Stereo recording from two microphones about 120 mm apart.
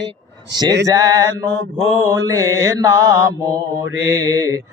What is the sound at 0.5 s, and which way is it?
Mantra, 30° right (ahead or behind).